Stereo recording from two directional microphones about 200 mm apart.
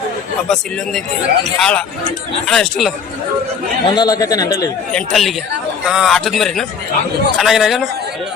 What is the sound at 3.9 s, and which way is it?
Speech, 20° left (ahead or behind).